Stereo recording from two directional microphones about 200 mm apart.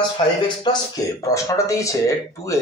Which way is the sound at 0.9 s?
15° left (ahead or behind).